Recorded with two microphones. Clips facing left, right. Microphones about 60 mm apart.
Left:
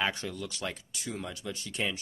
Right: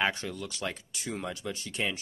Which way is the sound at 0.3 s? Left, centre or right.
Centre.